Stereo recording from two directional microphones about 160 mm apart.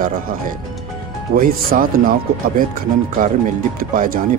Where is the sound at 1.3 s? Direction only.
65° right (ahead or behind).